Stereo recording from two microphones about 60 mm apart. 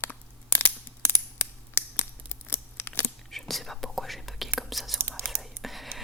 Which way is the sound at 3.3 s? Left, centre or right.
Centre.